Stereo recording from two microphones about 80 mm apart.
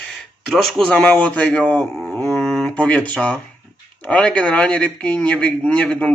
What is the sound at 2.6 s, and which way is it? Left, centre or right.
A man's voice, centre.